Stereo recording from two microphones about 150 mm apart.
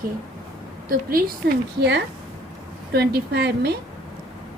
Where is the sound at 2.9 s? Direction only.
90° right.